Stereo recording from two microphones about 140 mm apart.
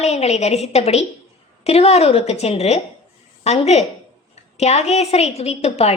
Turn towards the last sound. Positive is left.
turn(degrees=45)  # may be behind; listen again after turning